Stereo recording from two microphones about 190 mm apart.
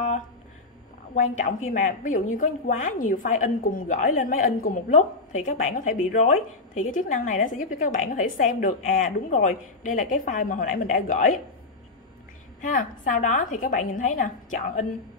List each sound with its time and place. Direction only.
1.1 s a woman's voice: 40° left (ahead or behind)
12.6 s a woman's voice: 45° left (ahead or behind)